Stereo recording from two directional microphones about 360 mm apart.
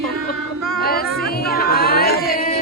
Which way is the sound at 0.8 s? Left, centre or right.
Left.